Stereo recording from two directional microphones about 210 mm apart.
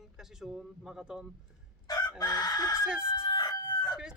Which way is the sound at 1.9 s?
20° left (ahead or behind).